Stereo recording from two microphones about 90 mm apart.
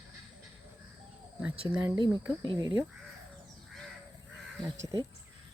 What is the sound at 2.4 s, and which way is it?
Speech, 50° right (ahead or behind).